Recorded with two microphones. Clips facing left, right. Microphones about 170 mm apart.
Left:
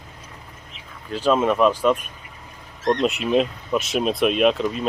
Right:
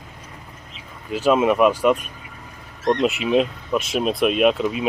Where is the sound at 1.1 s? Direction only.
10° right (ahead or behind).